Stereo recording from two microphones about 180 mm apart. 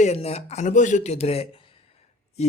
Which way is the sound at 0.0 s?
35° left (ahead or behind).